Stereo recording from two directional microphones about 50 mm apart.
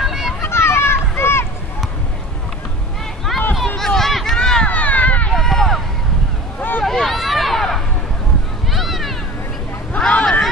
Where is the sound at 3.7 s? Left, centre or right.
Centre.